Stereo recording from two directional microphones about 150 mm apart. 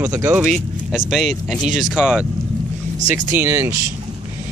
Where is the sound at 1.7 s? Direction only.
5° right (ahead or behind).